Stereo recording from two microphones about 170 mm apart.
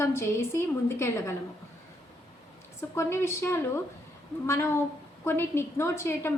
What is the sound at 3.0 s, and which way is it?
A woman's voice, 15° left (ahead or behind).